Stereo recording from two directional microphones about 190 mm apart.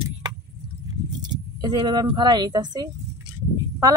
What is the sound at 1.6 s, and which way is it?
Speech, 20° right (ahead or behind).